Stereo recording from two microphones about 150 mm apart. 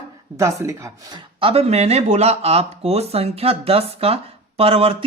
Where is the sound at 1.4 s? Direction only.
45° right (ahead or behind).